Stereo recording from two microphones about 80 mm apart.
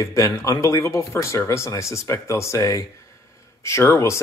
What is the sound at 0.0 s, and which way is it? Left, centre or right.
A man's voice, left.